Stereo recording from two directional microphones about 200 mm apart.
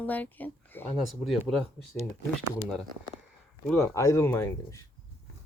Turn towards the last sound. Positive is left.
turn(degrees=15)  # may be behind; listen again after turning